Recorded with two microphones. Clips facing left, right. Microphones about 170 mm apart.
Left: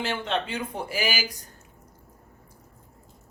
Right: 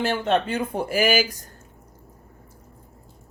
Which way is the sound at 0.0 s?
50° right (ahead or behind).